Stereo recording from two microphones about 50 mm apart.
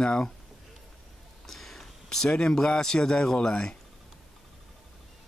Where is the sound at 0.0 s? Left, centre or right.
Centre.